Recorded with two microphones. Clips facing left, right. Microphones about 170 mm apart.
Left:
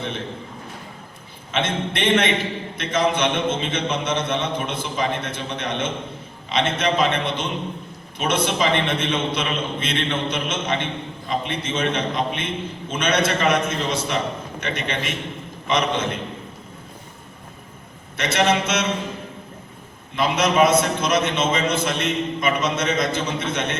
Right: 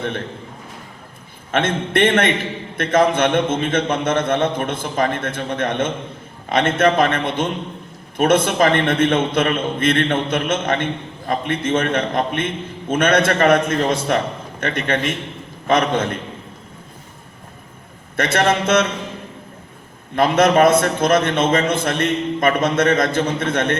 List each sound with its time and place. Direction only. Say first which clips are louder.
1.5 s a man's voice: right 4 dB; 50° right (ahead or behind)
18.2 s a man's voice: right 2 dB; 50° right (ahead or behind)
20.1 s a man's voice: right 5 dB; 50° right (ahead or behind)